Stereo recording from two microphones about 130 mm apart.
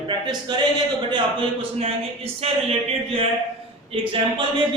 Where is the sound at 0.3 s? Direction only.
35° right (ahead or behind).